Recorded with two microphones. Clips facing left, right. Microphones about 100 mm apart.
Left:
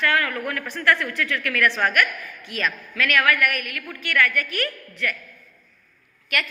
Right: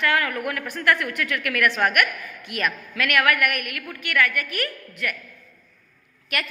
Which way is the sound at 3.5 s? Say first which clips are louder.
Even; 30° left (ahead or behind).